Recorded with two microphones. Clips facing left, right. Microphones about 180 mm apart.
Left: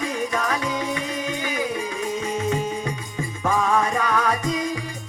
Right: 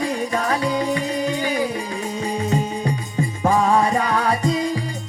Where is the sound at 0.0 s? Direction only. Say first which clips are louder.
Right 3 dB; 35° right (ahead or behind).